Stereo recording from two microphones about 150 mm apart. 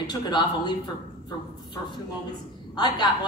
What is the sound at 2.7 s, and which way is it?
Speech, 30° left (ahead or behind).